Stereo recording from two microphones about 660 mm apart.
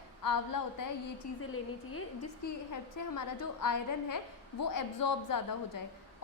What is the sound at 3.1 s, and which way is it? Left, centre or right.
A woman's voice, left.